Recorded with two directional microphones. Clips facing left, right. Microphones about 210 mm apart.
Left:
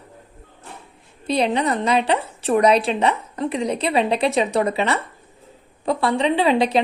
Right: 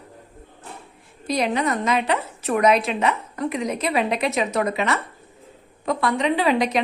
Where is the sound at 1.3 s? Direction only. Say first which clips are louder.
Left 2 dB; 30° left (ahead or behind).